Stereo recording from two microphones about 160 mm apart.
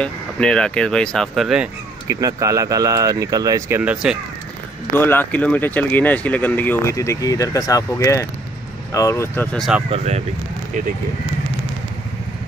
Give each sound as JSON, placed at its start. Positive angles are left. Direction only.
{"t": 0.0, "sound": "speech", "side_deg": 5}
{"t": 2.0, "sound": "speech", "side_deg": -20}
{"t": 4.9, "sound": "speech", "side_deg": 15}
{"t": 9.6, "sound": "speech", "side_deg": -5}
{"t": 9.8, "sound": "speech", "side_deg": -40}